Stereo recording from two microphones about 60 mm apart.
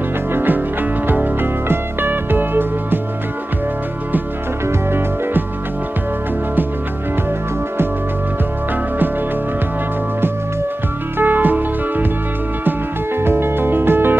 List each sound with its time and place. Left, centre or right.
0.3 s music: right
4.6 s music: right
11.1 s music: right